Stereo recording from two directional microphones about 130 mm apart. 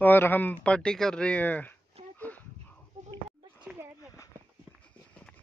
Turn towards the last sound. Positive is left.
turn(degrees=-10)  # may be behind; listen again after turning